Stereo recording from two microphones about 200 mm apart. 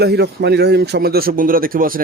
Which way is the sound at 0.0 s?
55° right (ahead or behind).